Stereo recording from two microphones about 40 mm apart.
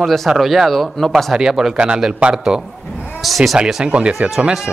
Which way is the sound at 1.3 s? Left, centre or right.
Centre.